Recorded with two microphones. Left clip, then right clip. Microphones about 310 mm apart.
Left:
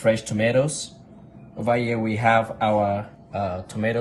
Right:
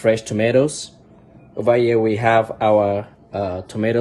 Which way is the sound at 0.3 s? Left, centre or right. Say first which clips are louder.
Right 4 dB; right.